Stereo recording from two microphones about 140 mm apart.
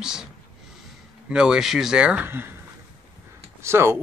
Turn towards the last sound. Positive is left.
turn(degrees=-20)  # may be behind; listen again after turning